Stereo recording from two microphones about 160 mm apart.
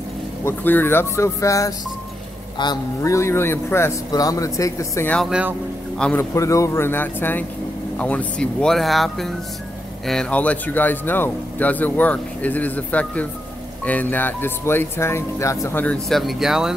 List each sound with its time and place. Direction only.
0.5 s speech: 15° left (ahead or behind)
5.3 s a man's voice: 10° right (ahead or behind)
5.9 s speech: 5° left (ahead or behind)
6.3 s speech: 20° left (ahead or behind); by 16.7 s 5° right (ahead or behind)